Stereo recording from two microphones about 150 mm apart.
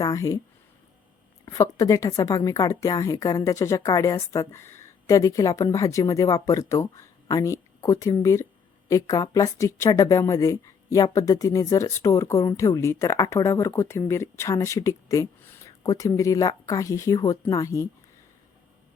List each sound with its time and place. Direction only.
0.0 s a woman's voice: 20° left (ahead or behind)
1.5 s a woman's voice: 20° left (ahead or behind)